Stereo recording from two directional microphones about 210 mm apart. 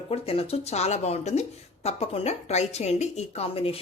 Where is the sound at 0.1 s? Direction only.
30° left (ahead or behind).